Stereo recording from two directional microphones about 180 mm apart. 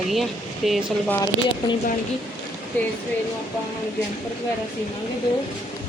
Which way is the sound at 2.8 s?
10° left (ahead or behind).